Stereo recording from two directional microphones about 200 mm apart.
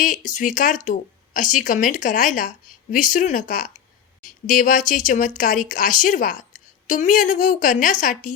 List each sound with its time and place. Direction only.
0.0 s speech: 40° left (ahead or behind)